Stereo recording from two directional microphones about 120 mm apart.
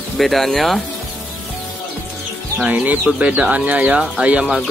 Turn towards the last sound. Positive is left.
turn(degrees=-10)  # may be behind; listen again after turning